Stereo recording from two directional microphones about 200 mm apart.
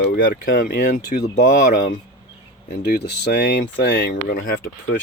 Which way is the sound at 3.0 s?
60° left (ahead or behind).